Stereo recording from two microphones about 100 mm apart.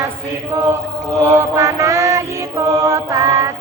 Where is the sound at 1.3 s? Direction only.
25° right (ahead or behind).